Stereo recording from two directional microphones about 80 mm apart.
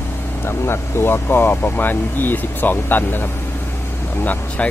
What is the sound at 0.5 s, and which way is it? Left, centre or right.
Speech, left.